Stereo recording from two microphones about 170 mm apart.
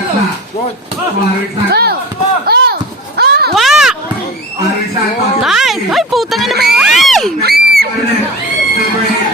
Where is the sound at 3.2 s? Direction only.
70° right (ahead or behind).